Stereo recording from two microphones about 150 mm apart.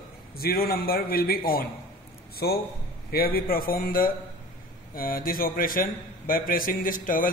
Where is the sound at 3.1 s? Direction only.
85° left.